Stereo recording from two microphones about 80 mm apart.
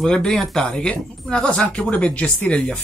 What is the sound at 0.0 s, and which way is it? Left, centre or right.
Speech, centre.